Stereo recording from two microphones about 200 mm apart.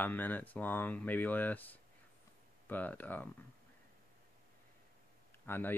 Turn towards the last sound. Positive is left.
turn(degrees=10)  # may be behind; listen again after turning